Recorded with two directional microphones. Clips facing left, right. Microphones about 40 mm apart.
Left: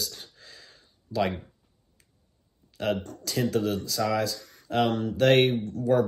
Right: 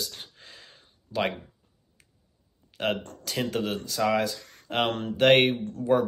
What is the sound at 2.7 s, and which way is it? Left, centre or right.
Speech, right.